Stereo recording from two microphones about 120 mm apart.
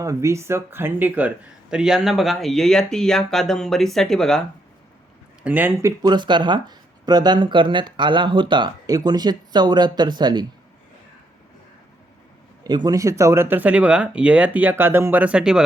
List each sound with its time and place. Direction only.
0.0 s speech: 25° right (ahead or behind); by 4.4 s 5° left (ahead or behind)
5.4 s speech: 15° right (ahead or behind)
5.8 s speech: 35° right (ahead or behind)
12.6 s speech: 35° right (ahead or behind); by 15.6 s 5° right (ahead or behind)